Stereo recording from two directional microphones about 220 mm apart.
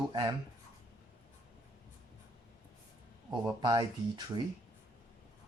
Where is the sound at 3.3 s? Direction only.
20° right (ahead or behind).